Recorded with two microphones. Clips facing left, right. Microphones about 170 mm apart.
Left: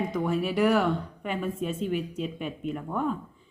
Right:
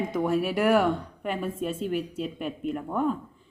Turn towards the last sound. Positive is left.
turn(degrees=-5)  # may be behind; listen again after turning